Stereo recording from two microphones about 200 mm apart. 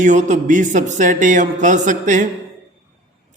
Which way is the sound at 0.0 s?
35° right (ahead or behind).